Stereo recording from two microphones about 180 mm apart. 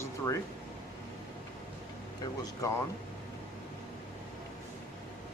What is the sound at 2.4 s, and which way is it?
Speech, 20° left (ahead or behind).